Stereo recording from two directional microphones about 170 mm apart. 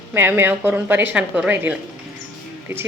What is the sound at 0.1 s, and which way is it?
A woman's voice, 15° right (ahead or behind).